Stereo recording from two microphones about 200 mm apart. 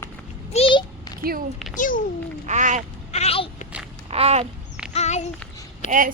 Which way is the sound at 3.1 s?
30° left (ahead or behind).